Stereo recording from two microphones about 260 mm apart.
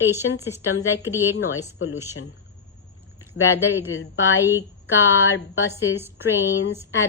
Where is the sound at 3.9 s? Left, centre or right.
Left.